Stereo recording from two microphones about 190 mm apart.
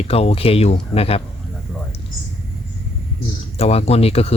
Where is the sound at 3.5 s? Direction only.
30° left (ahead or behind).